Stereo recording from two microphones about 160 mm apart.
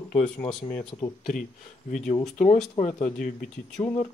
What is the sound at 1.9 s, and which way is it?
Speech, 50° left (ahead or behind).